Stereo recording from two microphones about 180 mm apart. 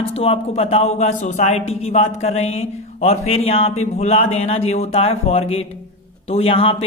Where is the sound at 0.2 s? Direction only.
35° left (ahead or behind).